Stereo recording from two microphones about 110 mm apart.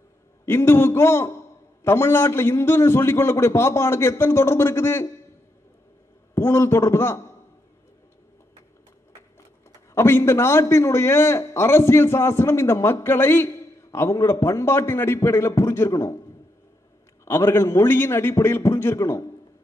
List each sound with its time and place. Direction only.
0.5 s a man's voice: 20° left (ahead or behind)
6.3 s a man's voice: 20° left (ahead or behind)
9.9 s a man's voice: 25° left (ahead or behind)
17.2 s a man's voice: 25° left (ahead or behind)